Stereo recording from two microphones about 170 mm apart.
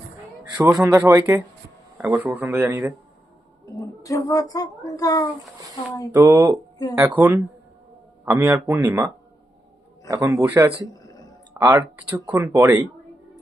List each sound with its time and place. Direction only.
0.8 s speech: 15° right (ahead or behind)
3.8 s a woman's voice: 20° left (ahead or behind)
6.1 s speech: 20° right (ahead or behind)
11.0 s a sound: 20° left (ahead or behind)
11.5 s speech: 10° right (ahead or behind)